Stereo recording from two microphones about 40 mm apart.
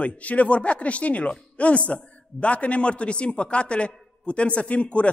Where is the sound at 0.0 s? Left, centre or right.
Left.